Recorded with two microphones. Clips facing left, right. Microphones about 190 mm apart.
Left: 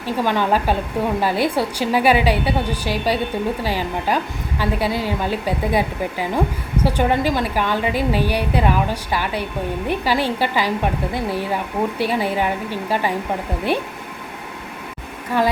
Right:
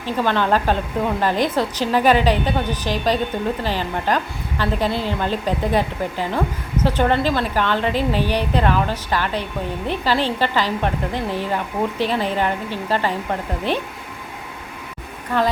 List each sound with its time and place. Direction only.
0.0 s a woman's voice: 10° left (ahead or behind)